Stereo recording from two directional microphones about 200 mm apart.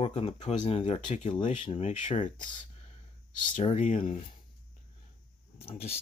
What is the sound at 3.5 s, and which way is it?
Speech, 35° left (ahead or behind).